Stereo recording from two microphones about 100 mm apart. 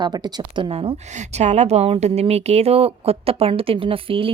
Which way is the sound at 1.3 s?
90° right.